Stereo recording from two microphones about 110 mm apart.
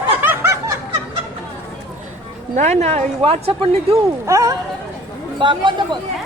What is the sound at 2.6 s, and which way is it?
Speech, 90° right.